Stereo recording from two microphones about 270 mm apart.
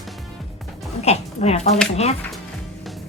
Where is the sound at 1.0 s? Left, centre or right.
Left.